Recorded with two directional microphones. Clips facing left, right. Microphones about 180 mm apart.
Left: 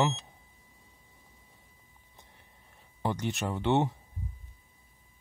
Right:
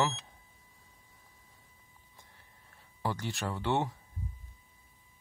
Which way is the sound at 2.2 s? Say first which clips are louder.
Left 2 dB; 20° left (ahead or behind).